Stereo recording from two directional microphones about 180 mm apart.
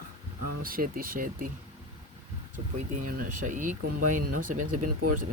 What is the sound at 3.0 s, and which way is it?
Speech, 50° right (ahead or behind).